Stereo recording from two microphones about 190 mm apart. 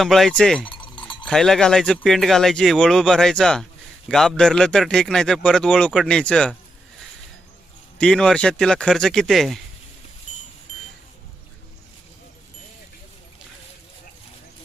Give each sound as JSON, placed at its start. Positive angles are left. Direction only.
{"t": 0.0, "sound": "speech", "side_deg": 0}
{"t": 0.7, "sound": "cowbell", "side_deg": 25}
{"t": 1.2, "sound": "speech", "side_deg": 0}
{"t": 7.9, "sound": "speech", "side_deg": 5}